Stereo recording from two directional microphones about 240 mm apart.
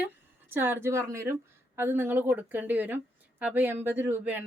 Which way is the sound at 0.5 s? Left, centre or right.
Centre.